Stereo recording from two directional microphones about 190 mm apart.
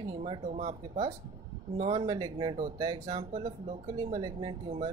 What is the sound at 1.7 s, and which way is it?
Speech, 25° right (ahead or behind).